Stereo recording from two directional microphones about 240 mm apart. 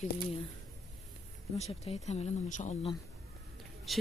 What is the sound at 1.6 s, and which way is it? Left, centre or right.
Speech, left.